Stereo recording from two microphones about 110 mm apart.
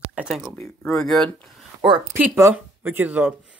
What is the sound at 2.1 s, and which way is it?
Speech, 20° right (ahead or behind).